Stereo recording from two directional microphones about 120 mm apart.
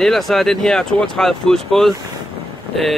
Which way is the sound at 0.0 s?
Centre (ahead or behind).